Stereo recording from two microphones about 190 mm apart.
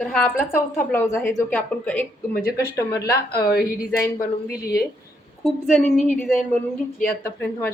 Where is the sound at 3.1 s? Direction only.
55° left (ahead or behind).